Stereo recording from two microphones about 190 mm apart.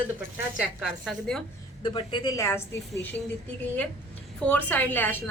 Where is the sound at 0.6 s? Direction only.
Centre (ahead or behind).